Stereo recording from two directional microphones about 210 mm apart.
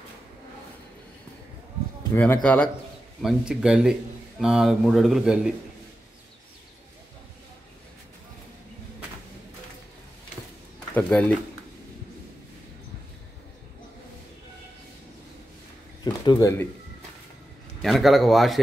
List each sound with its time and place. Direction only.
2.1 s speech: 10° left (ahead or behind)
11.0 s speech: 5° left (ahead or behind)
16.0 s speech: 20° left (ahead or behind)
17.8 s speech: centre (ahead or behind)